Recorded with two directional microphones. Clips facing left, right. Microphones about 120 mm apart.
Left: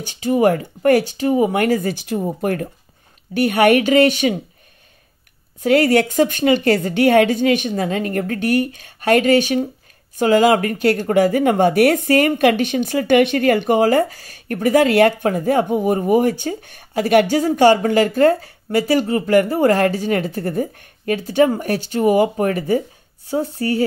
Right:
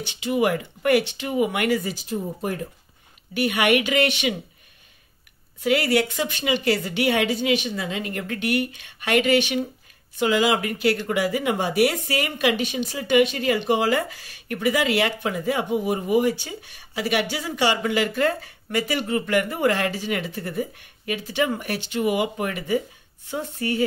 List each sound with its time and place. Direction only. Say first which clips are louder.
0.0 s speech: left 6 dB; 45° left (ahead or behind)
2.0 s speech: left 6 dB; 70° left (ahead or behind)
3.3 s speech: left 7 dB; 40° left (ahead or behind)
5.6 s speech: left 6 dB; 45° left (ahead or behind)